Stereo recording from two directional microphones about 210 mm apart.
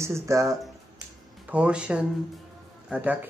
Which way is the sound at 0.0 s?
15° right (ahead or behind).